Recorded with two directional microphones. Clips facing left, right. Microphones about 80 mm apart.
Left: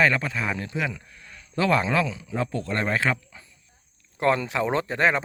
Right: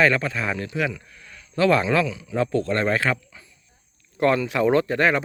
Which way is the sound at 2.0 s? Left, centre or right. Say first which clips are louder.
Right 2 dB; left.